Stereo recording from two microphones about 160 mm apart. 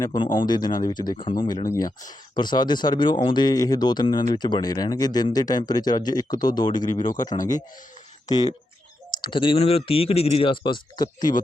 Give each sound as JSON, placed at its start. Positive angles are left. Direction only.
{"t": 0.0, "sound": "speech", "side_deg": 25}
{"t": 8.3, "sound": "speech", "side_deg": 25}